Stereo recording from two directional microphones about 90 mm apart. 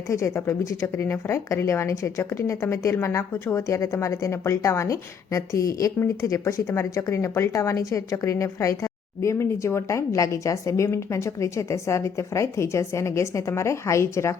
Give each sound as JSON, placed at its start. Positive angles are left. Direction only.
{"t": 0.1, "sound": "a woman's voice", "side_deg": 35}